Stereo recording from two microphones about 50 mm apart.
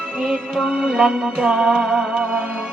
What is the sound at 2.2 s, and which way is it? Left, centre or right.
Music, right.